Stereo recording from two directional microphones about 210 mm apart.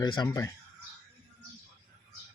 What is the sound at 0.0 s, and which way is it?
Speech, 20° left (ahead or behind).